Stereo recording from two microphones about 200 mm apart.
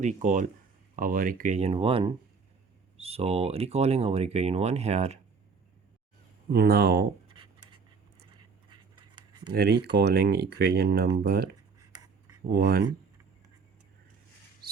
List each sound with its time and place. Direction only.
0.0 s speech: 40° right (ahead or behind)
6.5 s speech: 50° right (ahead or behind)
8.7 s writing: 25° right (ahead or behind)
9.5 s speech: 55° right (ahead or behind)
11.8 s a sound: 20° right (ahead or behind)
12.5 s speech: 50° right (ahead or behind)